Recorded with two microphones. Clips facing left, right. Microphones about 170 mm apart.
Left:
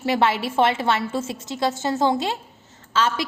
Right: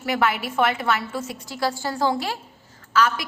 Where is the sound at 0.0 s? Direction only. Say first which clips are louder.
Left 2 dB; 25° left (ahead or behind).